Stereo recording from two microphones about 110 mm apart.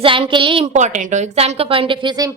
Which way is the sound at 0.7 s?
90° right.